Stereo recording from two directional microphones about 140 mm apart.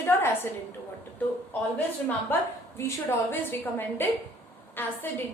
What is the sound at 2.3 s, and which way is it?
A woman's voice, 15° left (ahead or behind).